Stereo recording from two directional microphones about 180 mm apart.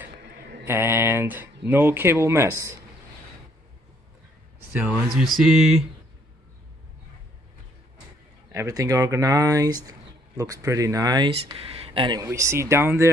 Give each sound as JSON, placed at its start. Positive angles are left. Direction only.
{"t": 0.7, "sound": "speech", "side_deg": -10}
{"t": 4.7, "sound": "speech", "side_deg": -5}
{"t": 8.5, "sound": "speech", "side_deg": -20}